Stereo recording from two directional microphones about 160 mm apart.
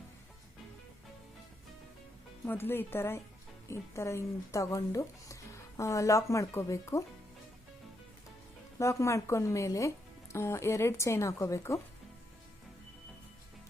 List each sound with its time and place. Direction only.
2.5 s speech: 15° left (ahead or behind)
8.8 s speech: 20° left (ahead or behind)